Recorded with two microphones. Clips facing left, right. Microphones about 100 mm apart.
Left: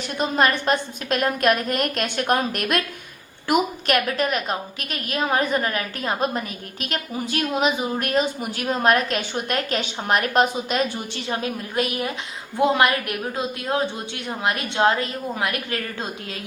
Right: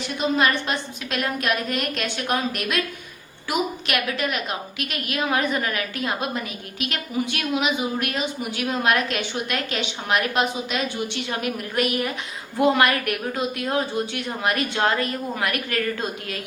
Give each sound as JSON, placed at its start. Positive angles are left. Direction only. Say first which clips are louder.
{"t": 0.2, "sound": "a woman's voice", "louder": "left 1 dB", "side_deg": 45}